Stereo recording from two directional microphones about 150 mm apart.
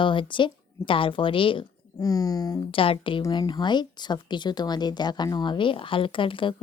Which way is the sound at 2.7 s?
35° left (ahead or behind).